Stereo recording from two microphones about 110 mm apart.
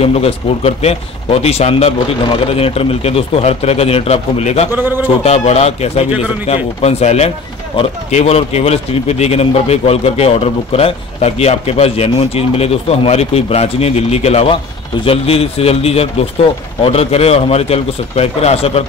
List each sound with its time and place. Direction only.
0.0 s a man's voice: 65° left (ahead or behind); by 4.6 s 85° left
4.7 s speech: 20° right (ahead or behind)
5.0 s a man's voice: 75° left (ahead or behind)